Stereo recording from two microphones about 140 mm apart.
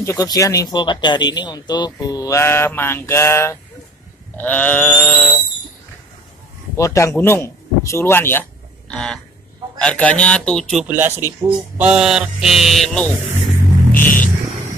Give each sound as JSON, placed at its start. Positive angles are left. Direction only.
{"t": 0.0, "sound": "speech", "side_deg": 20}
{"t": 6.8, "sound": "a man's voice", "side_deg": 20}
{"t": 10.9, "sound": "speech", "side_deg": -15}
{"t": 13.9, "sound": "music", "side_deg": 15}